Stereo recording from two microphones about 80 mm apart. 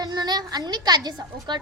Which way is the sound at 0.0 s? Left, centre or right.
Right.